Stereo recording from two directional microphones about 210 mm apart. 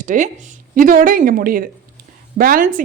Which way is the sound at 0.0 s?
40° right (ahead or behind).